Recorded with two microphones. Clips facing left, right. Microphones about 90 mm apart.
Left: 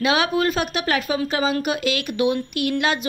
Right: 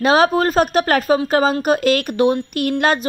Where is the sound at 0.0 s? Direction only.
40° right (ahead or behind).